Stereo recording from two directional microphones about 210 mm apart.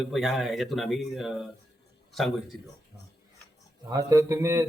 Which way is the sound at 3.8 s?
15° right (ahead or behind).